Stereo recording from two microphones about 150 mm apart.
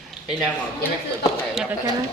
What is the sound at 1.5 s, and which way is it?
Speech, 5° right (ahead or behind).